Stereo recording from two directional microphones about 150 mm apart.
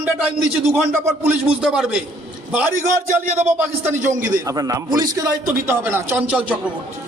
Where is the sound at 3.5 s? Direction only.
15° right (ahead or behind).